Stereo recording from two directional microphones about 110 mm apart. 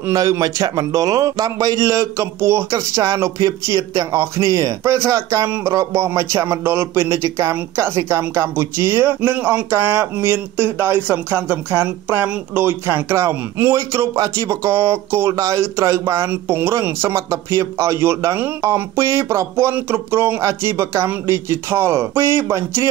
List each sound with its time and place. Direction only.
0.1 s a man's voice: 30° right (ahead or behind)